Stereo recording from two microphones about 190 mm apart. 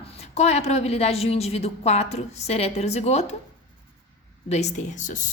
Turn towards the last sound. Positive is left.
turn(degrees=40)  # may be behind; listen again after turning